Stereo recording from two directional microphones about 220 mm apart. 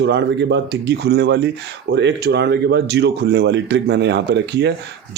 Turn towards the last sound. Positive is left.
turn(degrees=-50)  # may be behind; listen again after turning